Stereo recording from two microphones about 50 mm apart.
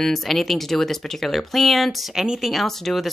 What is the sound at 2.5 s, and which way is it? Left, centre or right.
Speech, centre.